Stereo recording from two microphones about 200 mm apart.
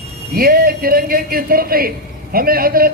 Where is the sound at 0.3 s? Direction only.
50° right (ahead or behind).